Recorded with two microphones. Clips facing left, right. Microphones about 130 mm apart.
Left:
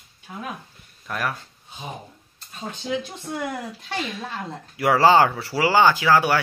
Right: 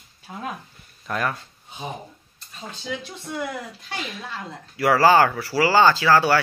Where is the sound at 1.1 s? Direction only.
5° left (ahead or behind).